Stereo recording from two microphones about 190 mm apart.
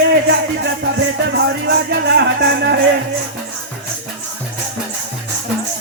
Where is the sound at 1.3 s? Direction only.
60° right (ahead or behind).